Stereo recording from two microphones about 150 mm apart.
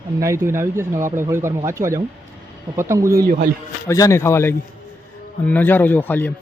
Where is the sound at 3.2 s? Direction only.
65° right (ahead or behind).